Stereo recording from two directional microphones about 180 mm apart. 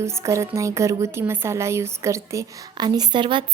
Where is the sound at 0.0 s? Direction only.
15° right (ahead or behind).